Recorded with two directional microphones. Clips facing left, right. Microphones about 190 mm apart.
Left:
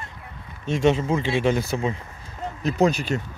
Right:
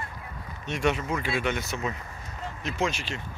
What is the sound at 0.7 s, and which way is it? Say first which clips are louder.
Speech: left 7 dB; 25° left (ahead or behind).